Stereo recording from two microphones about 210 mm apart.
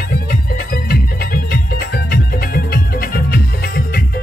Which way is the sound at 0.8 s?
45° left (ahead or behind).